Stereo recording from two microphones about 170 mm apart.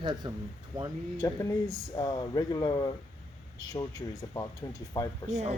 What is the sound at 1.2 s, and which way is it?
Speech, 20° left (ahead or behind).